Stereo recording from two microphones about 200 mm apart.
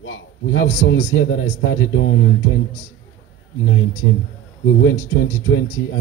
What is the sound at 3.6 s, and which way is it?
A man's voice, 80° left.